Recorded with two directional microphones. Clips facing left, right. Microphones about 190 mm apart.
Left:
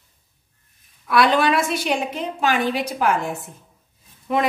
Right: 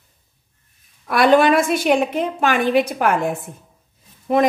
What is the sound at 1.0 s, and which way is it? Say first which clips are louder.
A woman's voice: right 4 dB; 50° right (ahead or behind).